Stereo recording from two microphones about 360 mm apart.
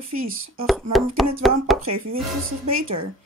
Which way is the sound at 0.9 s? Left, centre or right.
Centre.